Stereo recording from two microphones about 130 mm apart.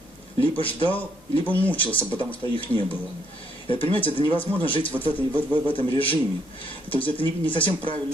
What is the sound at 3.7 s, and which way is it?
Speech, 40° left (ahead or behind).